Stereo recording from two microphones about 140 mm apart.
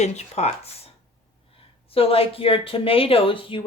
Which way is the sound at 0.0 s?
55° left (ahead or behind).